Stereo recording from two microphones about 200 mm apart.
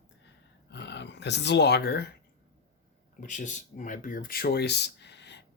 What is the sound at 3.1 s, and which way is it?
Speech, 40° left (ahead or behind).